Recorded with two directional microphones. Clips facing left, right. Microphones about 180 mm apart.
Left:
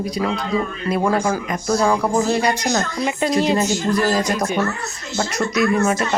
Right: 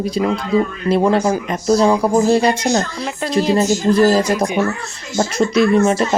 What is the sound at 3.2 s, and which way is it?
Speech, centre (ahead or behind).